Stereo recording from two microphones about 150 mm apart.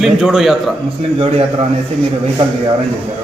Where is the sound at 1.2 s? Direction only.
40° right (ahead or behind).